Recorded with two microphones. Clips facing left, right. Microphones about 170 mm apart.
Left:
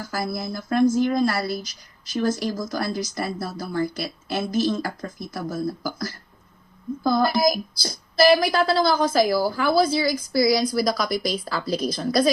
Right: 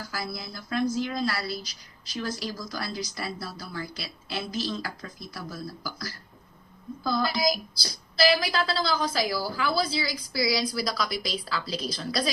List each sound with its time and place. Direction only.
0.0 s a woman's voice: 50° left (ahead or behind)